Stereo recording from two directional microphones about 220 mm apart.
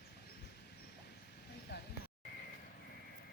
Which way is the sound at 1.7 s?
50° left (ahead or behind).